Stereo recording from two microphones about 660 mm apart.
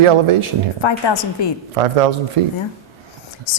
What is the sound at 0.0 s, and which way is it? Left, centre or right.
Speech, right.